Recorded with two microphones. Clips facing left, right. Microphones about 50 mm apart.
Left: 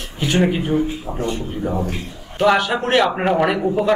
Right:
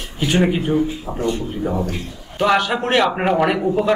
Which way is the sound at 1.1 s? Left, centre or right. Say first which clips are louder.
Right 4 dB; left.